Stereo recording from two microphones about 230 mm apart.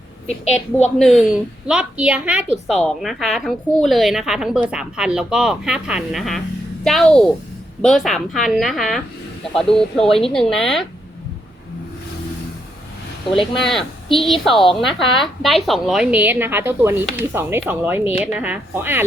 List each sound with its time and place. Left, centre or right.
0.3 s a woman's voice: left
0.9 s a woman's voice: centre
13.3 s a woman's voice: centre
14.5 s a woman's voice: left
14.8 s a woman's voice: centre